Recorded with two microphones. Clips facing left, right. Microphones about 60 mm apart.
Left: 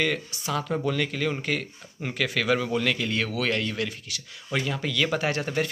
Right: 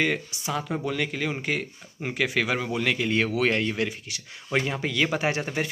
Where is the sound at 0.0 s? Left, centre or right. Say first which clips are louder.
Right 1 dB; centre.